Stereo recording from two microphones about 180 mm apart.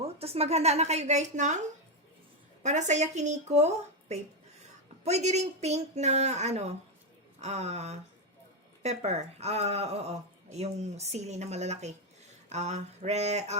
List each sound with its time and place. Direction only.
0.0 s speech: 35° right (ahead or behind)
2.6 s speech: 40° right (ahead or behind)